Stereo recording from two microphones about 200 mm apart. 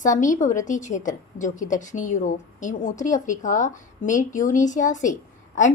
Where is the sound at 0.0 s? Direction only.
40° left (ahead or behind).